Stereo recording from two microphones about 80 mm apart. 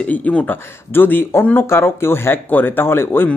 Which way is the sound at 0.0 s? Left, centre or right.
Centre.